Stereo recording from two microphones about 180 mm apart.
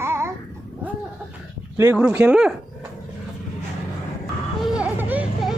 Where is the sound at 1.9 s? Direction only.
10° right (ahead or behind).